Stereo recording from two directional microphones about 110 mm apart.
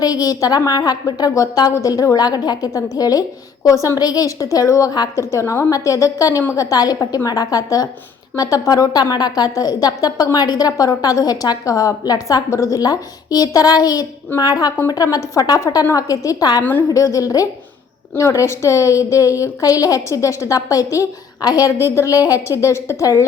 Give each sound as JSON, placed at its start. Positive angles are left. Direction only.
{"t": 0.0, "sound": "a woman's voice", "side_deg": 35}